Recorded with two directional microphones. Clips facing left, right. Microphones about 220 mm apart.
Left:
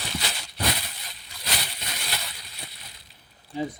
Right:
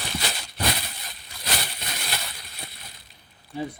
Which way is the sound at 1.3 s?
50° right (ahead or behind).